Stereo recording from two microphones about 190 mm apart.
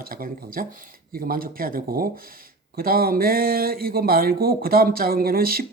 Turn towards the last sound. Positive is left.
turn(degrees=-50)  # may be behind; listen again after turning